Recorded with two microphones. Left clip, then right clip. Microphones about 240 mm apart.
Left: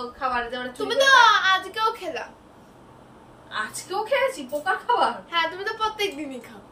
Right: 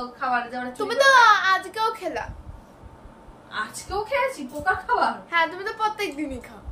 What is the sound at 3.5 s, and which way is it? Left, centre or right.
Speech, centre.